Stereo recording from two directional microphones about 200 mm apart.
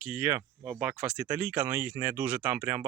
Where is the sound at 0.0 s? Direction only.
5° right (ahead or behind).